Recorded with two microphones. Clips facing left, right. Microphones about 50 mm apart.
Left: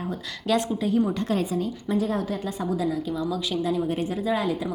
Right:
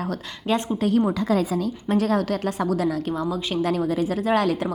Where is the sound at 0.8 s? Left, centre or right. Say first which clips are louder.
Right 5 dB; right.